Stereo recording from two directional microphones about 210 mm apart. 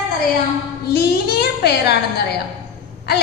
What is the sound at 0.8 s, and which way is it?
A woman's voice, 50° left (ahead or behind).